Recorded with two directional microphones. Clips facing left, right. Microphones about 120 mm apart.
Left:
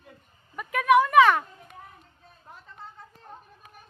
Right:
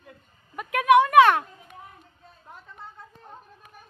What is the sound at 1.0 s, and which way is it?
Children playing, 5° right (ahead or behind).